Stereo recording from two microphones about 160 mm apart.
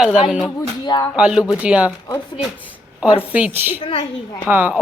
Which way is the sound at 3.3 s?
10° right (ahead or behind).